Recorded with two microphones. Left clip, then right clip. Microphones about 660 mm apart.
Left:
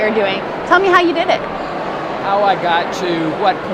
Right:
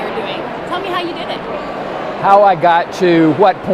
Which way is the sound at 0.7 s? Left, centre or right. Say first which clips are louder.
Left 10 dB; left.